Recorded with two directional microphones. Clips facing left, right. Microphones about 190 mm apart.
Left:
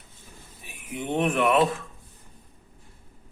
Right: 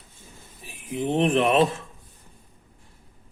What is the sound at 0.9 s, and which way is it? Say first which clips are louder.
Speech: right 3 dB; 25° right (ahead or behind).